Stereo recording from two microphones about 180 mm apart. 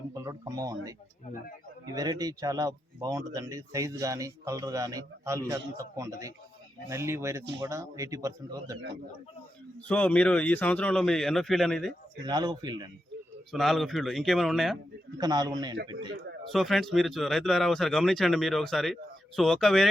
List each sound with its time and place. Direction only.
0.1 s speech: 20° right (ahead or behind)
9.9 s speech: 5° left (ahead or behind)
12.2 s speech: 25° right (ahead or behind)
13.5 s speech: centre (ahead or behind)
15.2 s speech: 20° right (ahead or behind)
16.5 s speech: centre (ahead or behind)